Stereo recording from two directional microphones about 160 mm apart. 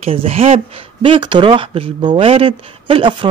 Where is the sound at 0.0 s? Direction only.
40° right (ahead or behind).